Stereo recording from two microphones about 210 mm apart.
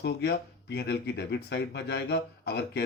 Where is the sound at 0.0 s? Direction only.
55° left (ahead or behind).